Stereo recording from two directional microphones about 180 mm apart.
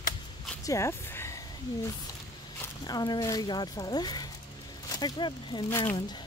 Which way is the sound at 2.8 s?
25° left (ahead or behind).